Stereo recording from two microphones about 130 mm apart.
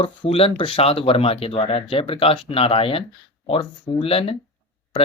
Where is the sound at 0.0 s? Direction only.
45° left (ahead or behind).